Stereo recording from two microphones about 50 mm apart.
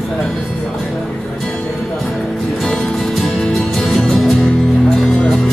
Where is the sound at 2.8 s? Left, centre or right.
Centre.